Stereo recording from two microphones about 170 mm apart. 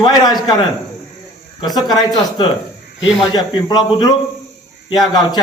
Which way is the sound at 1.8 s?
25° left (ahead or behind).